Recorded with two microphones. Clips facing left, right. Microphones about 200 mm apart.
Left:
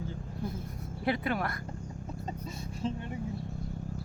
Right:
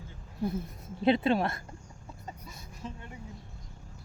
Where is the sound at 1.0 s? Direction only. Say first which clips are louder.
Right 6 dB; 25° right (ahead or behind).